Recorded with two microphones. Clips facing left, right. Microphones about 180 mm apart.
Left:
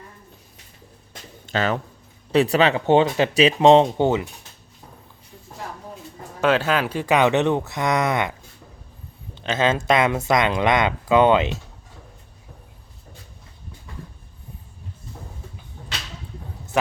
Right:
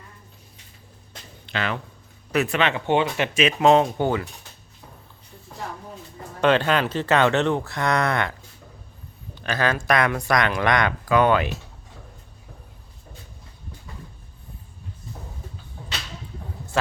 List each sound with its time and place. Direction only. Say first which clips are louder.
1.5 s speech: left 5 dB; 40° left (ahead or behind); by 4.3 s 20° left (ahead or behind)
6.4 s speech: even; 5° left (ahead or behind); by 11.5 s 20° left (ahead or behind)